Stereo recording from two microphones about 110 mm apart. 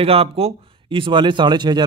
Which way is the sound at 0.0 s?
60° right (ahead or behind).